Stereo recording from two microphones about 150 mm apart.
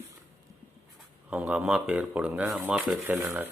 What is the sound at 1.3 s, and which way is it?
Speech, 10° right (ahead or behind).